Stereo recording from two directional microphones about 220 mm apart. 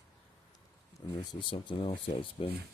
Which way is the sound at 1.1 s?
20° left (ahead or behind).